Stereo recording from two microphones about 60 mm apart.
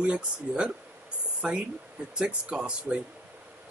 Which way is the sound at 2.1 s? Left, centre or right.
Centre.